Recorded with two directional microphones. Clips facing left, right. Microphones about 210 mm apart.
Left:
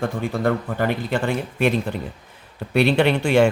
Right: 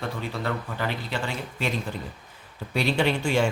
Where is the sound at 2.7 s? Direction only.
65° left (ahead or behind).